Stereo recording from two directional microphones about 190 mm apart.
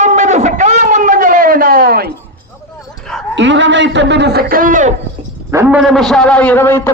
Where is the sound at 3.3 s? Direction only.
70° right (ahead or behind); by 4.9 s 45° right (ahead or behind).